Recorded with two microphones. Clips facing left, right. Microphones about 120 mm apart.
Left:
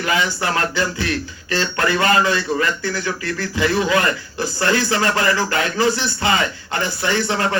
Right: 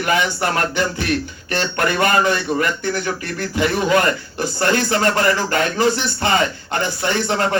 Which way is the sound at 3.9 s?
50° right (ahead or behind).